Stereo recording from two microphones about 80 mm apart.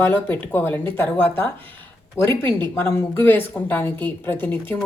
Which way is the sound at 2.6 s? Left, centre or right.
Left.